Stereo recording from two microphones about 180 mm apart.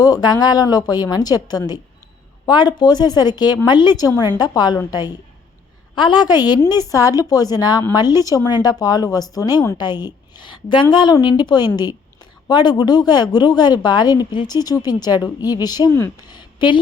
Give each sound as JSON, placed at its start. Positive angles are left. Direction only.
{"t": 0.0, "sound": "a woman's voice", "side_deg": 20}